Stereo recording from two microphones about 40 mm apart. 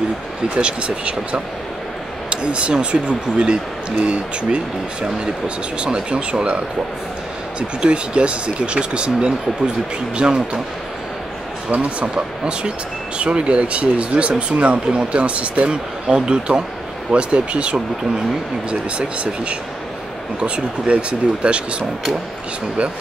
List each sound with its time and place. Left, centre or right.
0.6 s speech: right
5.8 s speech: right
7.8 s speech: right
11.7 s speech: right